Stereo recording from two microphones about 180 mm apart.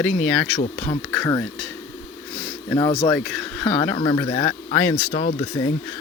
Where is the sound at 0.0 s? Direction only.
10° left (ahead or behind).